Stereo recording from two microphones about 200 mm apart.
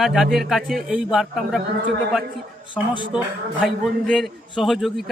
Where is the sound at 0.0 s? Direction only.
Centre (ahead or behind).